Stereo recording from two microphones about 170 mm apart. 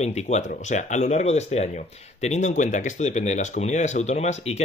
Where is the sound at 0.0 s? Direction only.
40° left (ahead or behind).